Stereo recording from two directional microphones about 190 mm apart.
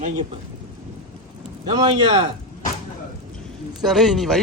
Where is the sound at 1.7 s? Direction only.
25° right (ahead or behind).